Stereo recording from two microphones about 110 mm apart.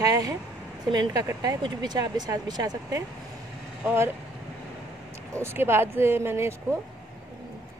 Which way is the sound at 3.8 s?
20° right (ahead or behind).